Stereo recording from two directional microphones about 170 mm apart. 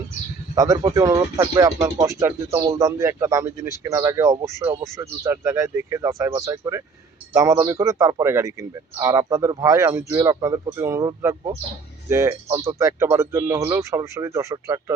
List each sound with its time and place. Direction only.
0.5 s speech: 20° right (ahead or behind)